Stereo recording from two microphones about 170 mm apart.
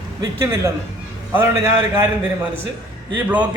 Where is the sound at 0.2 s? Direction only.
15° right (ahead or behind).